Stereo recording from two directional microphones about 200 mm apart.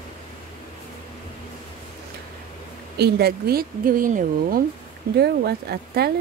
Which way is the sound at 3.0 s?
55° right (ahead or behind).